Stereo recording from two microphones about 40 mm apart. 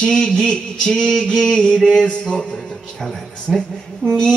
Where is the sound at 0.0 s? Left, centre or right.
Centre.